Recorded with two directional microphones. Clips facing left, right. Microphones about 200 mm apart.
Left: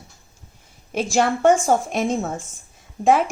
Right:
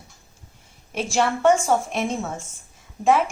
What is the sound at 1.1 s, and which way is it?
A woman's voice, 40° left (ahead or behind).